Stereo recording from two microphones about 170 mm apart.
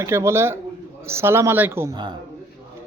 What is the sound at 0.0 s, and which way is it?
A woman's voice, 15° right (ahead or behind).